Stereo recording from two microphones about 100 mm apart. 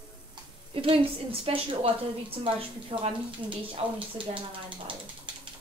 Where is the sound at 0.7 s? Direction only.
65° right (ahead or behind).